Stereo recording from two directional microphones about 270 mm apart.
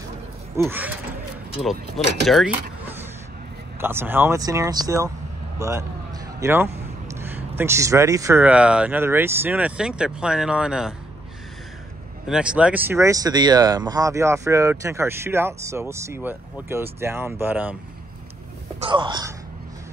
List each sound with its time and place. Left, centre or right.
0.6 s speech: centre
2.2 s speech: centre
3.8 s speech: centre
5.6 s a sound: centre
7.2 s speech: centre
12.3 s speech: centre
18.8 s speech: centre